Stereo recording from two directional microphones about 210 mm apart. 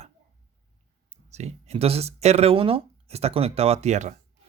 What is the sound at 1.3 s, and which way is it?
Speech, 30° right (ahead or behind).